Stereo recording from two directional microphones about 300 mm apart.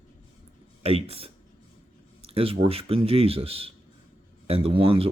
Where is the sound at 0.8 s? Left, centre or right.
Centre.